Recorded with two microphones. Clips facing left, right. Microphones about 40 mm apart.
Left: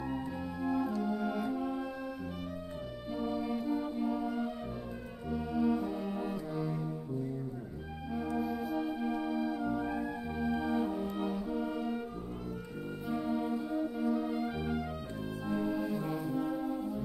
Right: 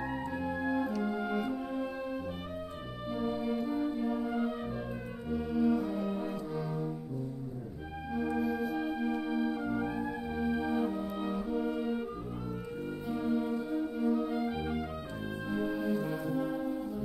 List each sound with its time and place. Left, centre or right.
0.1 s organ: right
3.1 s music: centre
5.3 s music: centre
8.1 s music: centre
9.8 s music: centre
13.1 s music: centre
14.3 s music: centre